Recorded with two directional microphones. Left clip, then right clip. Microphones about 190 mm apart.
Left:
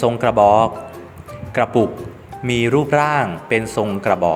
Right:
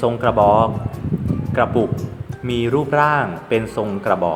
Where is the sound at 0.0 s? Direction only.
30° left (ahead or behind).